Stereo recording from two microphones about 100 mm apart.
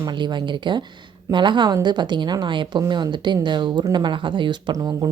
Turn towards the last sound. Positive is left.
turn(degrees=-40)  # may be behind; listen again after turning